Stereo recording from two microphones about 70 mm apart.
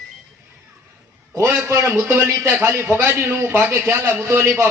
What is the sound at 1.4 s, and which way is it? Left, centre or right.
Speech, right.